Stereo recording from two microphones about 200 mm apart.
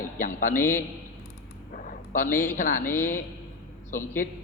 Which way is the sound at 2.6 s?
40° left (ahead or behind).